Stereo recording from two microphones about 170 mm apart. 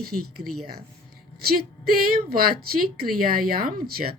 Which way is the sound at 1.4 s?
60° right (ahead or behind).